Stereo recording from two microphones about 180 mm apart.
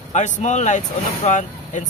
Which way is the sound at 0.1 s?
40° left (ahead or behind).